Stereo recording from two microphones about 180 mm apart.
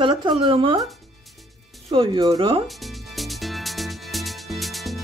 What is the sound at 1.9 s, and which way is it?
Speech, 25° right (ahead or behind).